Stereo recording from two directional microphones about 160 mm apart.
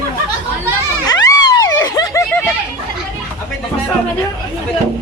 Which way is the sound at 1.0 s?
25° left (ahead or behind).